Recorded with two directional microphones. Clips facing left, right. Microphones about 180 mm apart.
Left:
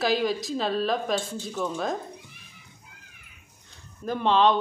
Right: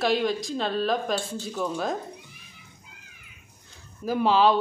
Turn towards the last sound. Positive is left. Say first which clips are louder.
# right 1 dB
turn(degrees=-5)  # may be behind; listen again after turning